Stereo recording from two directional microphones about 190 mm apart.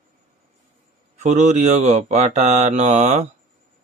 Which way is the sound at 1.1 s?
35° right (ahead or behind).